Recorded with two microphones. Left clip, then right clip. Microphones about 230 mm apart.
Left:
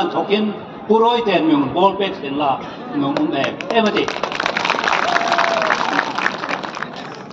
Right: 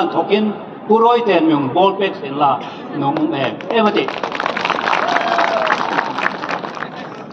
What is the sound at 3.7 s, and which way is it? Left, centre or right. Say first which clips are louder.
Speech: right 1 dB; left.